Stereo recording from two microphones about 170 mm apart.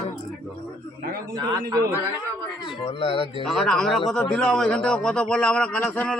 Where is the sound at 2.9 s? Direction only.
30° left (ahead or behind).